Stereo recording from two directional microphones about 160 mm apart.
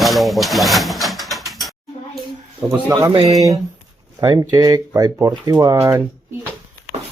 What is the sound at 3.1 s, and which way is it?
Speech, 30° right (ahead or behind).